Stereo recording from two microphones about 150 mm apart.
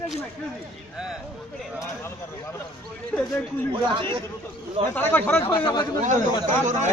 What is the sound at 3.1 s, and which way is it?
Speech, 5° left (ahead or behind).